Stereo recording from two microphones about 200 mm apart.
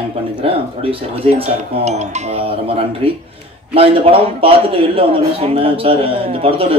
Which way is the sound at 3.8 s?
30° right (ahead or behind).